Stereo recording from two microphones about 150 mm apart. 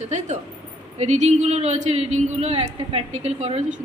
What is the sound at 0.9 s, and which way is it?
A man's voice, 50° right (ahead or behind).